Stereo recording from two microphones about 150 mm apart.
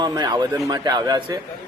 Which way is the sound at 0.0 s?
25° right (ahead or behind).